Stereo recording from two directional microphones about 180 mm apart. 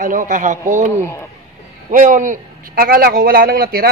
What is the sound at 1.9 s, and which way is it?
A man's voice, 45° right (ahead or behind).